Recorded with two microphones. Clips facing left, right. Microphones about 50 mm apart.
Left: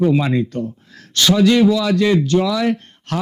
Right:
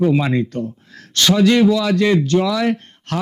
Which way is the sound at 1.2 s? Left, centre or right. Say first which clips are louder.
Even; right.